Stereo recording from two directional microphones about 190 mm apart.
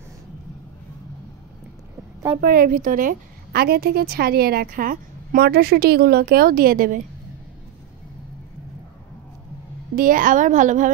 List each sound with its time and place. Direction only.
2.4 s a woman's voice: 50° right (ahead or behind)
9.9 s a woman's voice: 45° right (ahead or behind)